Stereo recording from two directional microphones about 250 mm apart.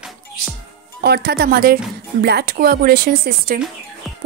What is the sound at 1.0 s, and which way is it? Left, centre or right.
Speech, right.